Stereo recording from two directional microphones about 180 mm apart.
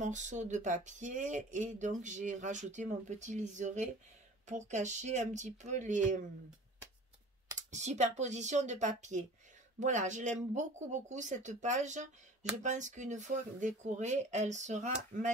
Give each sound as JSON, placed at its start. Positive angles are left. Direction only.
{"t": 0.0, "sound": "speech", "side_deg": -40}
{"t": 7.5, "sound": "speech", "side_deg": -40}